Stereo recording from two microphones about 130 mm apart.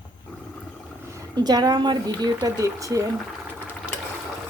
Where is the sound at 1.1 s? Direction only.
25° right (ahead or behind).